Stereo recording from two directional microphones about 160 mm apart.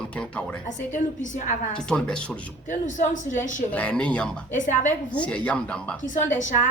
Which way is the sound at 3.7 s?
10° left (ahead or behind).